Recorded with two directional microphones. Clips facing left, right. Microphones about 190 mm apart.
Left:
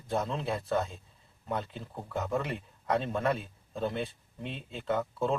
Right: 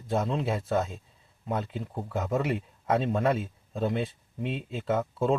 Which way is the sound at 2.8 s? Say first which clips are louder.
Right 4 dB; 10° right (ahead or behind).